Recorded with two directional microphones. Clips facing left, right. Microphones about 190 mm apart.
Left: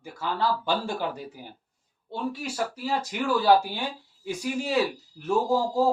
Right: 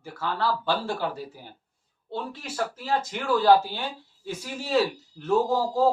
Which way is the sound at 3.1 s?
10° left (ahead or behind).